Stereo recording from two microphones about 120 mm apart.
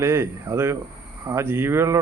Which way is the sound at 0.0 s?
20° right (ahead or behind).